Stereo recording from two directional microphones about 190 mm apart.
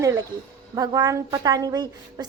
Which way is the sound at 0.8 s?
20° right (ahead or behind).